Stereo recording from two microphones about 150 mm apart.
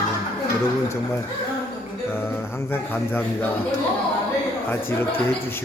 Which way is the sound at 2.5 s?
15° left (ahead or behind).